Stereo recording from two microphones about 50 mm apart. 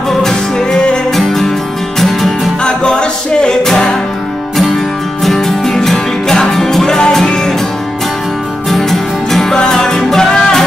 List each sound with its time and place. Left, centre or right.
0.2 s music: centre
2.6 s music: centre
5.2 s music: centre
8.6 s music: centre